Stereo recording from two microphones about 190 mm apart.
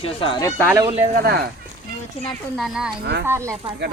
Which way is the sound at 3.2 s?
15° right (ahead or behind).